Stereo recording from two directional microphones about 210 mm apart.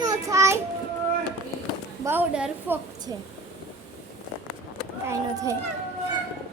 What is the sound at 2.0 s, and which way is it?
A woman's voice, 5° right (ahead or behind).